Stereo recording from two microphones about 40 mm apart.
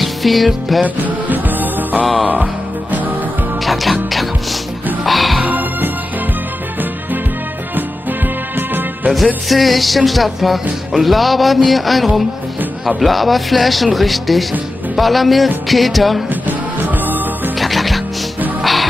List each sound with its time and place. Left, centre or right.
0.0 s music: centre
0.8 s music: right
3.6 s music: centre
5.0 s music: centre
5.5 s music: right
9.1 s music: centre
16.4 s music: right
17.6 s music: centre